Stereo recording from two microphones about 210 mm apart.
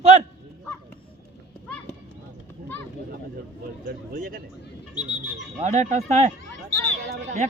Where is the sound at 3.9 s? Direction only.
40° right (ahead or behind).